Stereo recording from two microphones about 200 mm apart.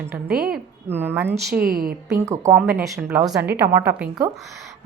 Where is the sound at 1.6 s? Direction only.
45° right (ahead or behind).